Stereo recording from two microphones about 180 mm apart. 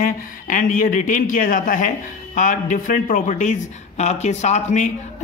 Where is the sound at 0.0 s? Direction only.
45° left (ahead or behind).